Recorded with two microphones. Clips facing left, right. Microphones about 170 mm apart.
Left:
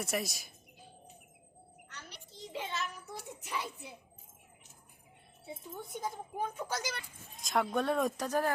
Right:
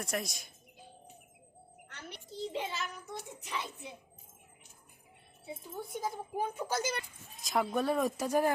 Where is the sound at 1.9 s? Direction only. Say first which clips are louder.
Right 4 dB; 50° right (ahead or behind).